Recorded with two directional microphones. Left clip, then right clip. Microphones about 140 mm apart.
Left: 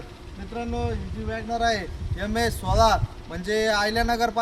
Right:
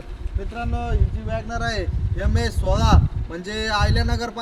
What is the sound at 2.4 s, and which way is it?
Speech, 15° left (ahead or behind).